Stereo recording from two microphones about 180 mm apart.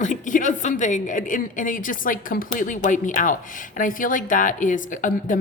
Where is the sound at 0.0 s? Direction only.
45° left (ahead or behind).